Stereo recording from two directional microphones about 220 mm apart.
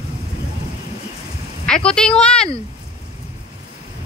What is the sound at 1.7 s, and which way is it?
Speech, 5° left (ahead or behind).